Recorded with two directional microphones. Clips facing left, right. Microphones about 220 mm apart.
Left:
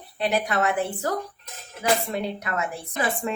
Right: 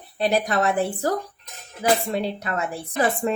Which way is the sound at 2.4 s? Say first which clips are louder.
Right 2 dB; 30° right (ahead or behind).